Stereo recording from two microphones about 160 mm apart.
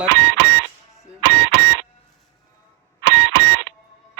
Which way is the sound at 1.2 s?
90° right.